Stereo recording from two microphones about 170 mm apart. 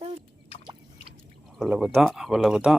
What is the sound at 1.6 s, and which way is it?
A man's voice, centre (ahead or behind).